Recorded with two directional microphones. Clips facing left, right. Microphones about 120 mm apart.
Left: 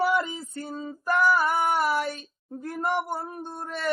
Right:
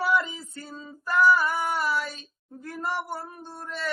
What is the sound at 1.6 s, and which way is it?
Speech, 55° left (ahead or behind).